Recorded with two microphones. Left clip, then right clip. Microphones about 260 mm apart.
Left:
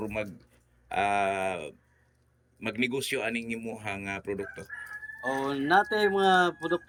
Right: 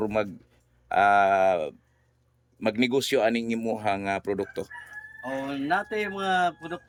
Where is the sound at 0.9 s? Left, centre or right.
Centre.